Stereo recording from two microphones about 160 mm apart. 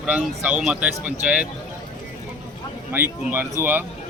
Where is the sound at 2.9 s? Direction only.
10° right (ahead or behind).